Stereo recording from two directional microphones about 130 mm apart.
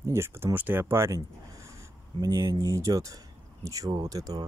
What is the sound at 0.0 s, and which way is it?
Speech, 20° right (ahead or behind).